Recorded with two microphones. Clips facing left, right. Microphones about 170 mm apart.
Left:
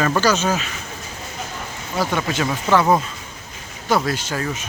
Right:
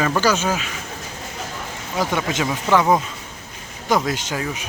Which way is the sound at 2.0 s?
15° right (ahead or behind).